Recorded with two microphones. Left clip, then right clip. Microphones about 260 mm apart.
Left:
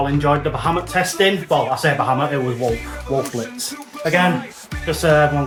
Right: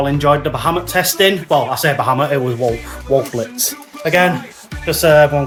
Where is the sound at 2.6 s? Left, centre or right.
Centre.